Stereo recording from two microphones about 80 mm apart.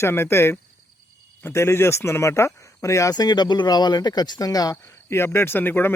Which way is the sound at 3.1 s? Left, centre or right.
Left.